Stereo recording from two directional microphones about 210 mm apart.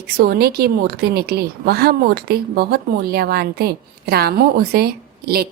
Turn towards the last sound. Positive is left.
turn(degrees=-45)  # may be behind; listen again after turning